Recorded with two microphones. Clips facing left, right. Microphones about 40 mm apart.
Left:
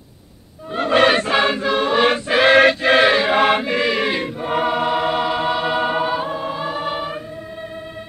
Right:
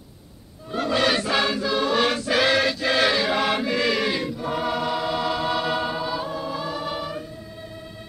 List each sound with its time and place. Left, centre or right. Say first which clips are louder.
0.7 s choir: left 7 dB; left
5.9 s music: left 7 dB; left